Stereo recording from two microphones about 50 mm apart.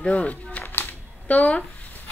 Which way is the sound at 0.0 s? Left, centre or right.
Left.